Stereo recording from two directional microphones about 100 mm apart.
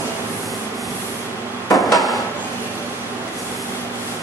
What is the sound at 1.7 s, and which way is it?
Drawer open or close, centre (ahead or behind).